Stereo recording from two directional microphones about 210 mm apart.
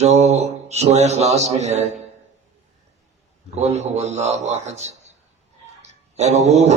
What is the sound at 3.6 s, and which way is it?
Speech, 30° right (ahead or behind).